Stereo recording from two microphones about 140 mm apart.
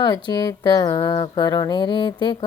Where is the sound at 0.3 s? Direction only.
30° left (ahead or behind).